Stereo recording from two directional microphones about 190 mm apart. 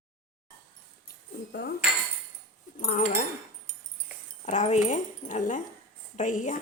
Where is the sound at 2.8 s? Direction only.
40° left (ahead or behind).